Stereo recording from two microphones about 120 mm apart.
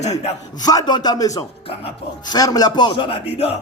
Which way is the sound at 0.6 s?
35° left (ahead or behind).